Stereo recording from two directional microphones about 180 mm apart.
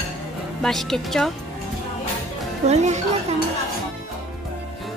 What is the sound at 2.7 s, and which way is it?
Speech, 40° right (ahead or behind).